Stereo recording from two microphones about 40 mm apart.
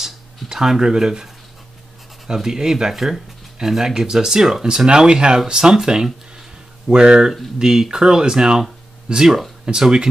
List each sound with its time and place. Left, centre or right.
0.0 s speech: centre